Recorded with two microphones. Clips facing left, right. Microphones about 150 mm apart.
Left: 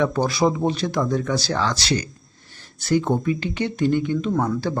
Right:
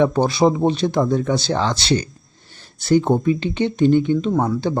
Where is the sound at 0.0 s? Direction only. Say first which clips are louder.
Right 4 dB; 25° right (ahead or behind).